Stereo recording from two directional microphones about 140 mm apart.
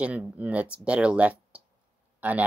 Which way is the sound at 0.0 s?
10° right (ahead or behind).